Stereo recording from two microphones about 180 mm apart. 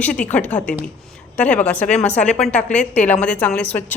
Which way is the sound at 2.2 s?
35° left (ahead or behind).